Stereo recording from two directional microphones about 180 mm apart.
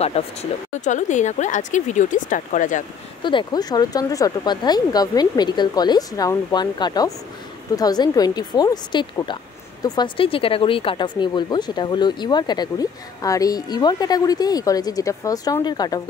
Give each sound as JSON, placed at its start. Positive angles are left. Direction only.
{"t": 0.0, "sound": "speech", "side_deg": 35}
{"t": 3.2, "sound": "speech", "side_deg": 25}